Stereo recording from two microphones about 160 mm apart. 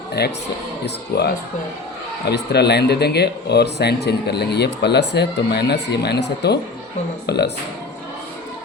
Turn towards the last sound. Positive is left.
turn(degrees=90)